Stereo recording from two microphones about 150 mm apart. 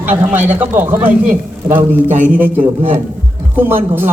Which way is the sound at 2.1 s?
60° right (ahead or behind).